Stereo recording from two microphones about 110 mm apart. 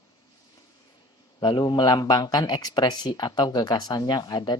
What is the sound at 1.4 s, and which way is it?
Speech, 45° left (ahead or behind).